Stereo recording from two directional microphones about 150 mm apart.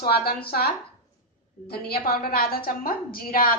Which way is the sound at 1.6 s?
90° left.